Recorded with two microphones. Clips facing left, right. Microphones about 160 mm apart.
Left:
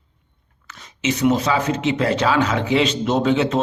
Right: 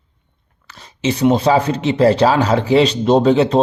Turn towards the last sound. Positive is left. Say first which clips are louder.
# right 6 dB
turn(degrees=-35)  # may be behind; listen again after turning